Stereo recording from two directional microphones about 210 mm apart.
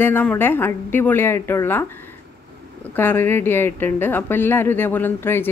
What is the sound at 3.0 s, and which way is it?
Speech, 10° left (ahead or behind).